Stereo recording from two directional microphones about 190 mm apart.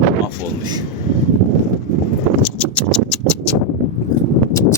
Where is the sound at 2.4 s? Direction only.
5° left (ahead or behind).